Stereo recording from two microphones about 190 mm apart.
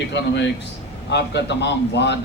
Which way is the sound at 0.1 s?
65° left (ahead or behind).